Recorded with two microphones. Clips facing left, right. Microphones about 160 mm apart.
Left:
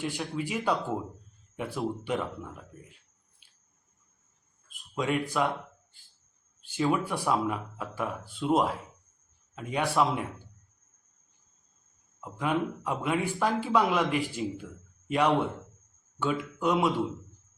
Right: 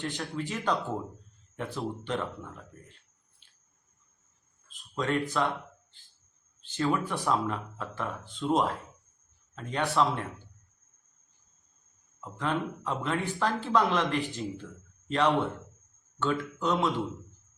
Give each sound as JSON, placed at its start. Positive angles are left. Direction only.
{"t": 0.0, "sound": "speech", "side_deg": 10}
{"t": 4.7, "sound": "speech", "side_deg": 10}
{"t": 6.6, "sound": "speech", "side_deg": 10}
{"t": 12.2, "sound": "speech", "side_deg": 10}